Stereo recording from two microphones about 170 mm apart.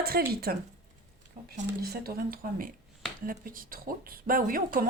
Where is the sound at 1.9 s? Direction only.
60° right (ahead or behind).